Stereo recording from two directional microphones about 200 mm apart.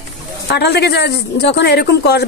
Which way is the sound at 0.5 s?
55° left (ahead or behind).